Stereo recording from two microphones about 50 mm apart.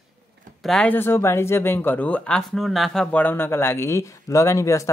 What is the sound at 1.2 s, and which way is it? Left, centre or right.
Speech, left.